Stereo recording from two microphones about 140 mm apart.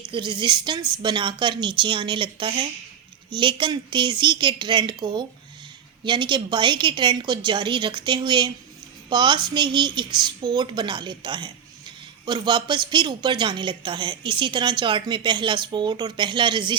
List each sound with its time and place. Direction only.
0.1 s speech: 35° right (ahead or behind)